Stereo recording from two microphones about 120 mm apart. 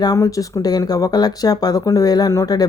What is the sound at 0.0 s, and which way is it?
Speech, 30° left (ahead or behind).